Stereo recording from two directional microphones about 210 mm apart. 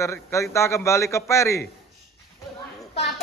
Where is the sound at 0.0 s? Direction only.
15° left (ahead or behind).